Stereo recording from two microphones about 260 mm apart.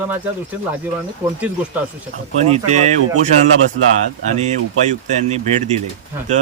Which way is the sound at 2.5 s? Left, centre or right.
Right.